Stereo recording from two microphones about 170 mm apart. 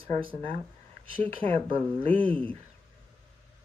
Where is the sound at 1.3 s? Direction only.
30° right (ahead or behind).